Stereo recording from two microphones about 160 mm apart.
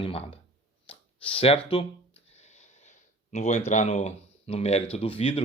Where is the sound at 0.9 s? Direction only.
35° left (ahead or behind).